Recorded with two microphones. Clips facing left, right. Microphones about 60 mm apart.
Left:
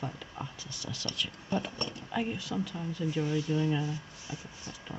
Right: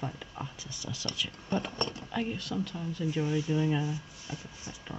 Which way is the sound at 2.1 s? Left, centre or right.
Centre.